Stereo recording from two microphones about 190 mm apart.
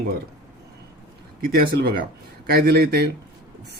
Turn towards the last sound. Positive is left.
turn(degrees=-60)  # may be behind; listen again after turning